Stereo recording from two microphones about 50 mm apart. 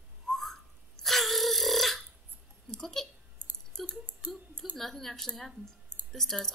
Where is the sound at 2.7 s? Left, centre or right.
Centre.